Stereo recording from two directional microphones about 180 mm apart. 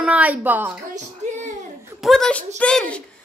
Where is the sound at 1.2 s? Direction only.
40° right (ahead or behind).